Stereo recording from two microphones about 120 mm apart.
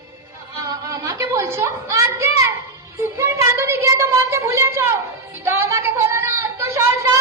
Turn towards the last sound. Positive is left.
turn(degrees=-25)  # may be behind; listen again after turning